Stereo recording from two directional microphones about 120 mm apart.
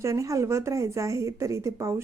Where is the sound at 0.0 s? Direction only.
25° right (ahead or behind).